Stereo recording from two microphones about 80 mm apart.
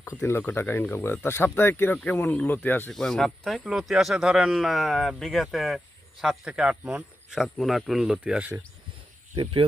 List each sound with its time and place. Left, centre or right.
0.2 s speech: left
2.9 s speech: centre